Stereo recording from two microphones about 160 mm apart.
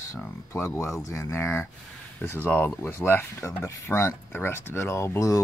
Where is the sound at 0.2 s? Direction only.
15° left (ahead or behind).